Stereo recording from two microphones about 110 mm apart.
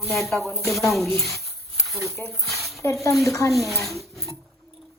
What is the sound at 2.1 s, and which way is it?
Speech, 25° left (ahead or behind).